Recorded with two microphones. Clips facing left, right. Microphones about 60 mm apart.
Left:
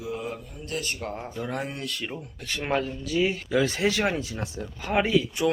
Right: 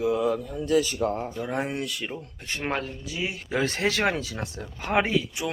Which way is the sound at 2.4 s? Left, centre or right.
Right.